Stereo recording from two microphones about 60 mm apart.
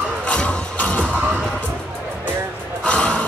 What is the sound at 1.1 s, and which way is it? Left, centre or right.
Music, right.